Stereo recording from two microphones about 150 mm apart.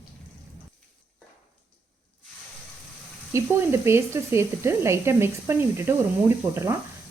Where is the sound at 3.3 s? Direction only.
15° right (ahead or behind).